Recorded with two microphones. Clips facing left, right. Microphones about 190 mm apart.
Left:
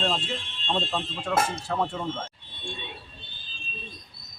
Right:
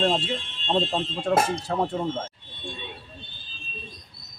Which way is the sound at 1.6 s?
40° right (ahead or behind).